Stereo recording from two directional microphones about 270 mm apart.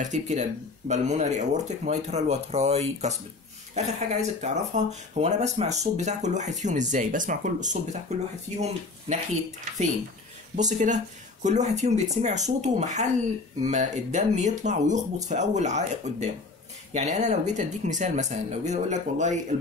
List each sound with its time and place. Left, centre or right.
0.0 s speech: right
10.5 s speech: right